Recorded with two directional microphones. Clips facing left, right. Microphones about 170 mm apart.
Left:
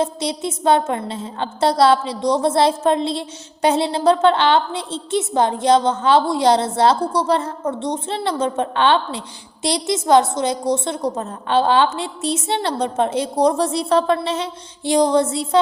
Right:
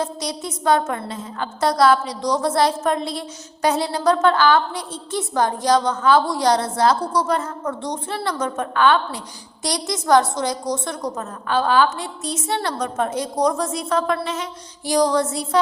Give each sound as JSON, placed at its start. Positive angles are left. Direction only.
{"t": 0.0, "sound": "a woman's voice", "side_deg": 25}